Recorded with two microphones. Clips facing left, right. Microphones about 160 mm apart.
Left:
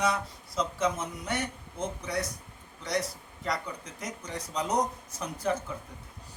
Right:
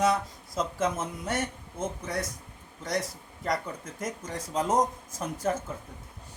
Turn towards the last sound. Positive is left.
turn(degrees=-45)  # may be behind; listen again after turning